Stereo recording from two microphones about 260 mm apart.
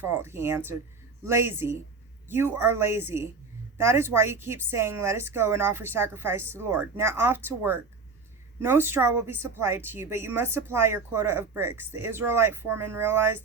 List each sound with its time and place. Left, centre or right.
0.0 s a woman's voice: centre